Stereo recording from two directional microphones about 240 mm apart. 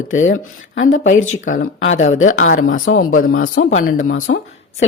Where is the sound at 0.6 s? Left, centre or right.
Left.